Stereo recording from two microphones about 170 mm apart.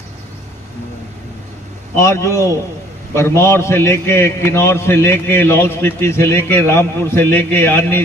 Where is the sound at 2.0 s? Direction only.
15° left (ahead or behind).